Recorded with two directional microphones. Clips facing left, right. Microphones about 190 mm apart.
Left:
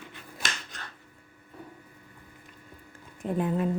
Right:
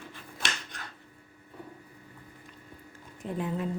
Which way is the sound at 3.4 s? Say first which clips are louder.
Left 5 dB; 55° left (ahead or behind).